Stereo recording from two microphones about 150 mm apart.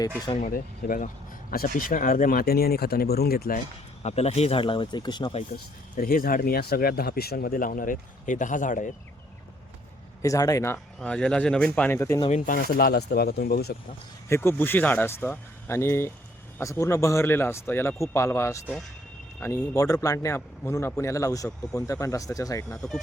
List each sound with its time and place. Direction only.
0.3 s speech: 65° left (ahead or behind); by 3.6 s 90° left
4.0 s speech: 45° left (ahead or behind)
5.5 s speech: 45° left (ahead or behind)
6.0 s speech: 75° left (ahead or behind)
10.2 s speech: 20° left (ahead or behind)
12.3 s speech: 80° left
14.3 s speech: 15° left (ahead or behind)
22.7 s speech: 5° left (ahead or behind)